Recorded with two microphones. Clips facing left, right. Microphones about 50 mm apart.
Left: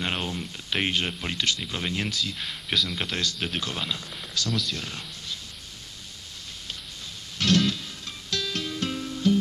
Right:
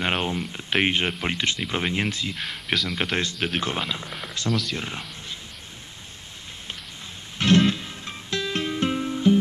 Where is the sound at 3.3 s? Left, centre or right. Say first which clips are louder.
Right 4 dB; centre.